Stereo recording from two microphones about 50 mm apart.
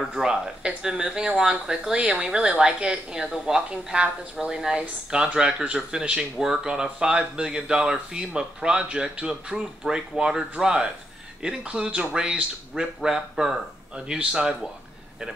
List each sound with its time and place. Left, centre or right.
0.1 s speech: centre